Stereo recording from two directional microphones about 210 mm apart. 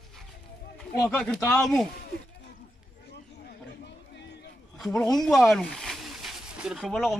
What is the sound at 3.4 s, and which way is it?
Chatter, 55° left (ahead or behind).